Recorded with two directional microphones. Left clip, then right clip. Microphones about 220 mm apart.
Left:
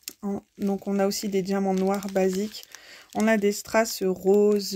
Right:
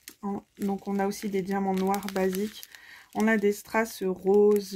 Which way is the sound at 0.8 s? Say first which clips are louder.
Left 5 dB; 35° left (ahead or behind).